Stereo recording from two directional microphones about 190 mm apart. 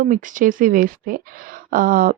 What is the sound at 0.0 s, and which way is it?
A woman's voice, 45° right (ahead or behind).